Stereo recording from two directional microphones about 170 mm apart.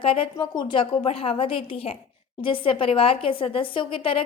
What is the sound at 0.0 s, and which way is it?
A woman's voice, 30° left (ahead or behind).